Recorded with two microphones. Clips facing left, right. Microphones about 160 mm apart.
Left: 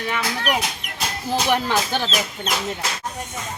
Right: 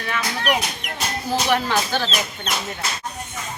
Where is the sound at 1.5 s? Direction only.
15° left (ahead or behind).